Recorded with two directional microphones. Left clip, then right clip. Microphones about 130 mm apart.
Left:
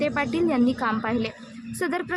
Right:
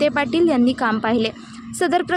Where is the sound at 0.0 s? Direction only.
40° right (ahead or behind).